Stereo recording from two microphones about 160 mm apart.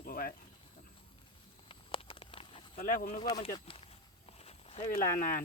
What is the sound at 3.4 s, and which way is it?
Speech, 35° left (ahead or behind).